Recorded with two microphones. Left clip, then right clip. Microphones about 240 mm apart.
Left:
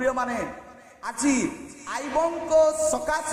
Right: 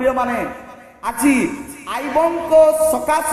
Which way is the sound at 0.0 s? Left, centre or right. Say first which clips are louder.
Right 7 dB; centre.